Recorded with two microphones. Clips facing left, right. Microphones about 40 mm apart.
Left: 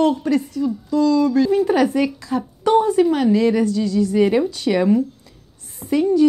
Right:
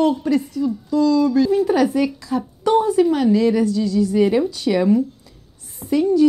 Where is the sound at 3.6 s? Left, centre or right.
Left.